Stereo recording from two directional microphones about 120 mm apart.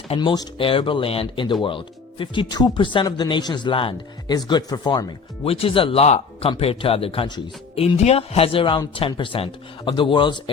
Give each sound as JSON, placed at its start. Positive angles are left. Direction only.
{"t": 0.2, "sound": "speech", "side_deg": 40}
{"t": 4.3, "sound": "speech", "side_deg": 35}
{"t": 5.5, "sound": "speech", "side_deg": 50}
{"t": 7.3, "sound": "speech", "side_deg": 35}
{"t": 7.8, "sound": "speech", "side_deg": 60}